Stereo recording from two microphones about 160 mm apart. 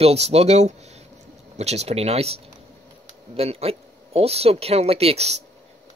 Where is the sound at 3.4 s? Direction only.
40° right (ahead or behind).